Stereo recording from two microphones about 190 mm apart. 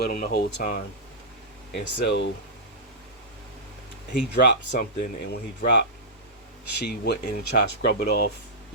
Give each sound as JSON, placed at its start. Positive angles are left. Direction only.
{"t": 0.0, "sound": "speech", "side_deg": 50}
{"t": 1.7, "sound": "speech", "side_deg": 60}
{"t": 4.4, "sound": "speech", "side_deg": 55}
{"t": 6.8, "sound": "speech", "side_deg": 60}